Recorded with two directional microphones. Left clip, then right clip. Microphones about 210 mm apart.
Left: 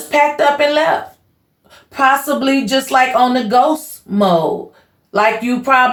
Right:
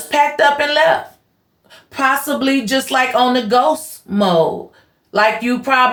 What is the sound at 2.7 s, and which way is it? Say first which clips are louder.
Speech: left 3 dB; 30° right (ahead or behind).